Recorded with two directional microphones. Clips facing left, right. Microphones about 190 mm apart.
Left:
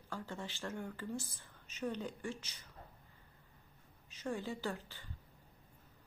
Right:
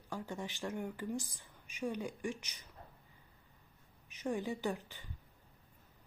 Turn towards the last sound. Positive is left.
turn(degrees=-15)  # may be behind; listen again after turning